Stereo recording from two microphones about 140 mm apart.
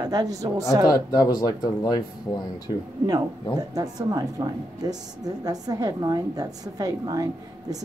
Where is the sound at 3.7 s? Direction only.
25° right (ahead or behind).